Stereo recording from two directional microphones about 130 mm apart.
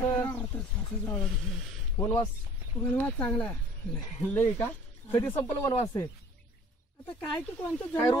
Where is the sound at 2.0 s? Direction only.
25° left (ahead or behind).